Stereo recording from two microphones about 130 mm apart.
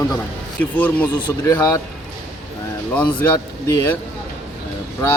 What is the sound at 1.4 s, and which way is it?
Speech, 25° left (ahead or behind).